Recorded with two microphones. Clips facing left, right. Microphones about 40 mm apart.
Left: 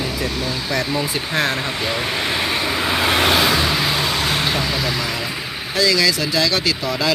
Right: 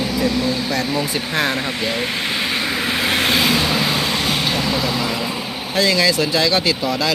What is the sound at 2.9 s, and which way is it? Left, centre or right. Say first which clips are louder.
Vehicle: left 3 dB; left.